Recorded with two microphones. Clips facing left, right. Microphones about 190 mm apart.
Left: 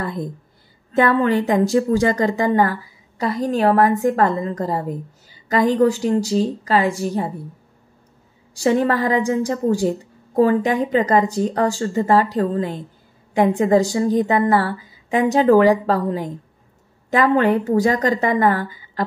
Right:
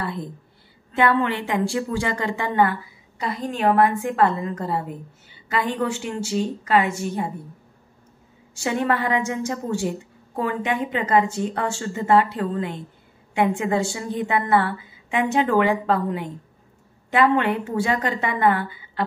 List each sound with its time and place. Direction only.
0.9 s a woman's voice: 40° left (ahead or behind)
8.5 s a woman's voice: 35° left (ahead or behind)